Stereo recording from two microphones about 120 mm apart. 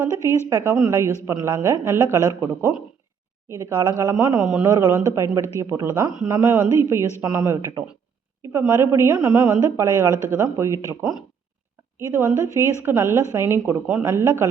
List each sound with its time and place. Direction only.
0.0 s a woman's voice: 20° right (ahead or behind)
3.5 s a woman's voice: 30° right (ahead or behind)